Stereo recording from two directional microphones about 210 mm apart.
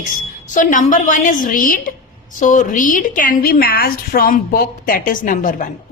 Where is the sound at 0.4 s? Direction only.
35° left (ahead or behind).